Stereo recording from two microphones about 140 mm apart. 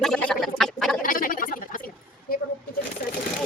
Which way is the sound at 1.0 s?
80° left.